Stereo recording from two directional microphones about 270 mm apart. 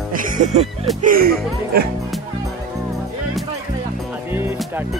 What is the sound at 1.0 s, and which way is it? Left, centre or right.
Speech, right.